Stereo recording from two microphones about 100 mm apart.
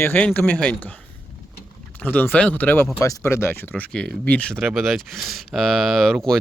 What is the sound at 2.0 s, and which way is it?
Speech, 20° left (ahead or behind).